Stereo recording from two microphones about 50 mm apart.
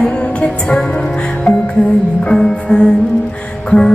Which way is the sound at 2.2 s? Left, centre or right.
Centre.